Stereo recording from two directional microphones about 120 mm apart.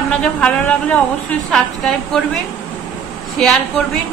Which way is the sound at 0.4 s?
10° left (ahead or behind).